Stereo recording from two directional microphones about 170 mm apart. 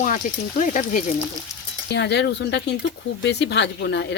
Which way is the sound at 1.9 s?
90° left.